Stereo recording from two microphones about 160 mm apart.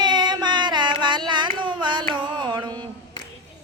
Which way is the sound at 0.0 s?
25° right (ahead or behind).